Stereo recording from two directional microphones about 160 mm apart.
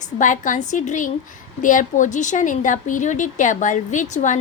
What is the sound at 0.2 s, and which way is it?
A woman's voice, 55° left (ahead or behind).